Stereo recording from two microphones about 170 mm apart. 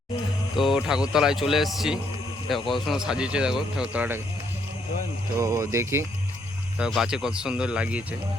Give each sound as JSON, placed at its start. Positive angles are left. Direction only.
{"t": 0.5, "sound": "speech", "side_deg": 0}
{"t": 5.4, "sound": "speech", "side_deg": -20}
{"t": 6.7, "sound": "speech", "side_deg": -5}